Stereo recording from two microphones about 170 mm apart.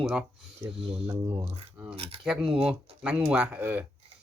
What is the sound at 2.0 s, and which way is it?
Speech, 35° right (ahead or behind).